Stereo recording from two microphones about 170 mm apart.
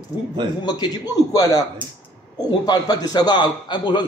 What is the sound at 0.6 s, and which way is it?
A man's voice, 25° left (ahead or behind).